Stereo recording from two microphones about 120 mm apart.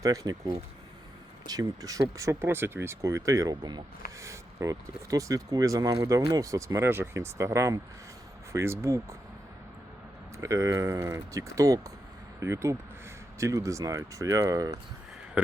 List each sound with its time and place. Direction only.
0.0 s speech: 30° right (ahead or behind)
10.3 s speech: 25° right (ahead or behind)